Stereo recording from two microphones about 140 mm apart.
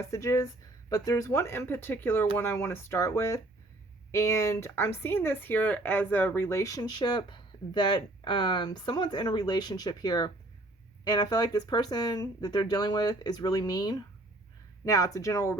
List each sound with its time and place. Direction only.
0.0 s speech: 20° left (ahead or behind)